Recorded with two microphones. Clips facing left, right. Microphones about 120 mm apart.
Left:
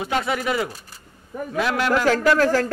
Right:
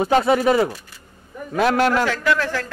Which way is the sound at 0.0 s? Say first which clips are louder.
Right 7 dB; 35° right (ahead or behind).